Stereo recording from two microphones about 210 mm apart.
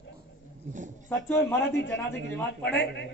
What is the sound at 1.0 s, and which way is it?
Speech, 10° left (ahead or behind).